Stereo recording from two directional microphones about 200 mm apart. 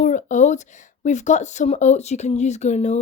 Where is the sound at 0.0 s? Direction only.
40° left (ahead or behind).